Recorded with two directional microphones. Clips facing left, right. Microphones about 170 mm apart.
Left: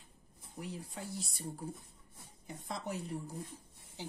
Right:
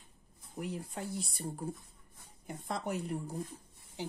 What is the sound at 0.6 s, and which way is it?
Speech, 55° right (ahead or behind).